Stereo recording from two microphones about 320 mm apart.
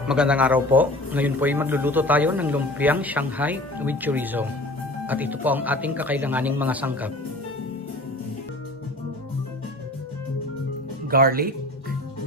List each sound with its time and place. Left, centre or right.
0.1 s a man's voice: centre
11.1 s speech: right